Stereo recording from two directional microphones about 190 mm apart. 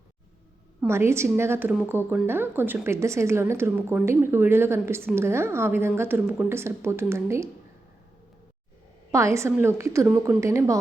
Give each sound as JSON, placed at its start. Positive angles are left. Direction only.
{"t": 0.8, "sound": "a woman's voice", "side_deg": -15}
{"t": 9.1, "sound": "a woman's voice", "side_deg": -15}